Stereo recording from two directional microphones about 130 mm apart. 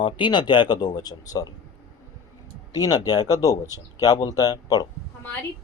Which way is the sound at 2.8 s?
30° left (ahead or behind).